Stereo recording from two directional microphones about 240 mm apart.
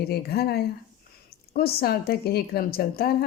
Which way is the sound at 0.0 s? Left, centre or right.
Left.